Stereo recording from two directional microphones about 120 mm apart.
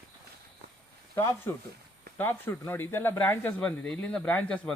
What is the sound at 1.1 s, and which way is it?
A man's voice, 20° left (ahead or behind).